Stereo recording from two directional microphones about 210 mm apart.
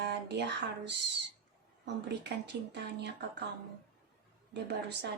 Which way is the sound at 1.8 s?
55° right (ahead or behind).